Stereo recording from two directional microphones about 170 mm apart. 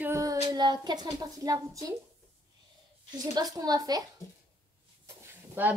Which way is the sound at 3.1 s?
25° right (ahead or behind).